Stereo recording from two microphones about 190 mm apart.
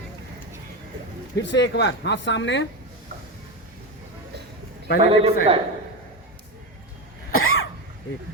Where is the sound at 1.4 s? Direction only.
65° left (ahead or behind).